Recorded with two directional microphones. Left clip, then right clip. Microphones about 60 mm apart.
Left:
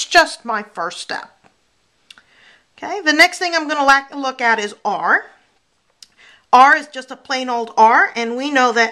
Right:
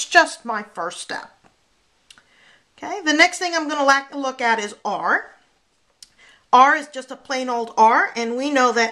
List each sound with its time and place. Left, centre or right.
0.0 s a woman's voice: left
5.9 s a sound: left
7.2 s speech: left